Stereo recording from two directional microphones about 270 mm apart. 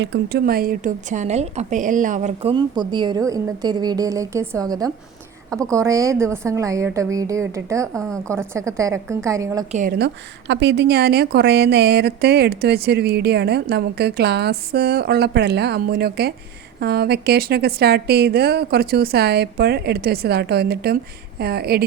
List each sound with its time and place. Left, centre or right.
0.0 s a woman's voice: right; by 9.6 s centre
9.7 s a woman's voice: right